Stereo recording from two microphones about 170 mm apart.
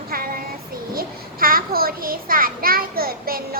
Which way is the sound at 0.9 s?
60° right (ahead or behind).